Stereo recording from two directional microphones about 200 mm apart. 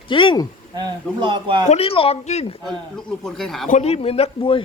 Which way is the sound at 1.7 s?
30° left (ahead or behind).